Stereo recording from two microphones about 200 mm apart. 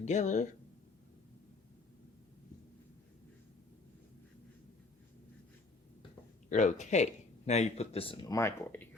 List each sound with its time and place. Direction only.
0.0 s speech: 35° left (ahead or behind)
6.5 s speech: 40° left (ahead or behind); by 8.9 s 10° left (ahead or behind)